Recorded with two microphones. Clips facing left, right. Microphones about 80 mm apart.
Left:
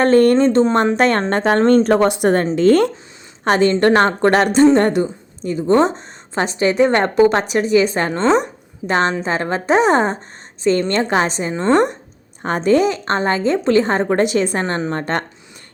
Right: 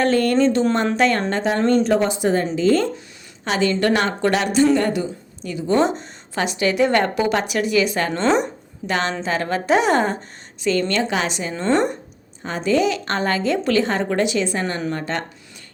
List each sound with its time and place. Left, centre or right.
0.0 s a woman's voice: left
3.4 s a woman's voice: left
12.4 s a woman's voice: left